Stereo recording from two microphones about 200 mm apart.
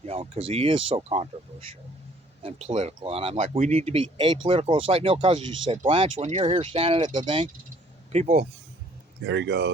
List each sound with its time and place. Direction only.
0.0 s speech: 30° right (ahead or behind)
2.4 s speech: 30° right (ahead or behind)
8.1 s speech: 35° right (ahead or behind)
9.2 s speech: 60° right (ahead or behind)